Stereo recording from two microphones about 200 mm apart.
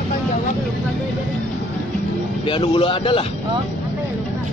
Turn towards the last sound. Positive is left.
turn(degrees=25)  # may be behind; listen again after turning